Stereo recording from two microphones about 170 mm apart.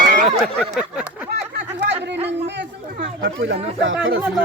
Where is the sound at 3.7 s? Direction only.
90° right.